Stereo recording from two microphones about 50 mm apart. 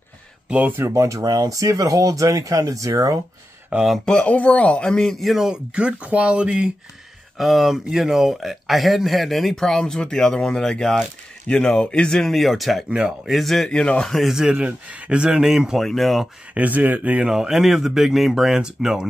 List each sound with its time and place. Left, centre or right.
0.7 s speech: right
4.0 s speech: centre
4.3 s speech: left; by 5.2 s centre
5.2 s speech: centre
5.5 s speech: right
7.3 s speech: centre
11.4 s speech: left
12.3 s speech: centre
13.7 s speech: centre
14.5 s speech: right
15.4 s speech: centre
15.8 s speech: centre
16.5 s speech: right
17.3 s speech: centre